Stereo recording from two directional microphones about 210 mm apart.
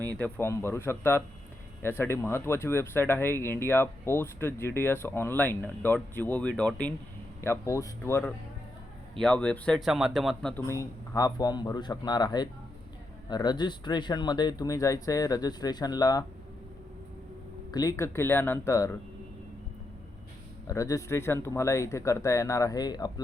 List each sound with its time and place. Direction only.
0.2 s speech: 10° left (ahead or behind)
11.1 s speech: 15° left (ahead or behind)
17.7 s speech: 15° left (ahead or behind)
20.7 s speech: 15° left (ahead or behind)